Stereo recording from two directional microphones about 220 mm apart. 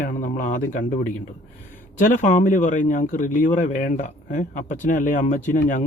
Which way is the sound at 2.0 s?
35° left (ahead or behind).